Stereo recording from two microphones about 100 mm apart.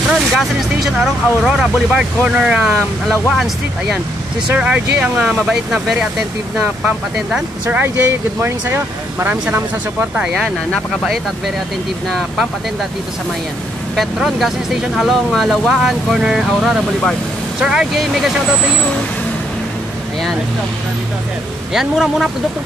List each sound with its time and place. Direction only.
0.4 s speech: centre (ahead or behind)
2.7 s speech: 5° left (ahead or behind)
4.6 s speech: 10° right (ahead or behind)
7.2 s speech: 10° right (ahead or behind)
7.8 s speech: 25° right (ahead or behind)
12.1 s speech: centre (ahead or behind)
13.9 s speech: centre (ahead or behind)
21.7 s speech: centre (ahead or behind)